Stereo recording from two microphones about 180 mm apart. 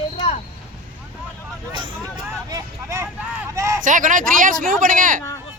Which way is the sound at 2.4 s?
20° right (ahead or behind).